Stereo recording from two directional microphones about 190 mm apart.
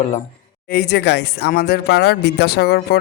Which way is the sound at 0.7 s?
55° left (ahead or behind).